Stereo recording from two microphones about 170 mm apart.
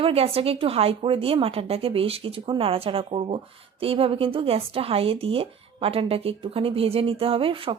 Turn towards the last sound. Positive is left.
turn(degrees=-30)  # may be behind; listen again after turning